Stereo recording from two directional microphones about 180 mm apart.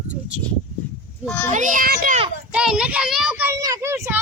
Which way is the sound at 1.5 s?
45° right (ahead or behind).